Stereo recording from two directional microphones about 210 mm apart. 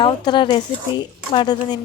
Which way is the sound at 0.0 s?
20° left (ahead or behind).